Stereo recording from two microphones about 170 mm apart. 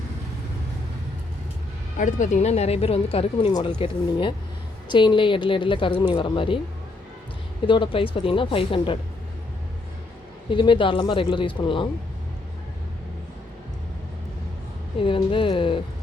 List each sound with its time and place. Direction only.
2.0 s speech: 45° left (ahead or behind); by 6.6 s 30° left (ahead or behind)
7.7 s speech: 30° left (ahead or behind)
10.5 s speech: 30° left (ahead or behind)
14.9 s speech: 30° left (ahead or behind)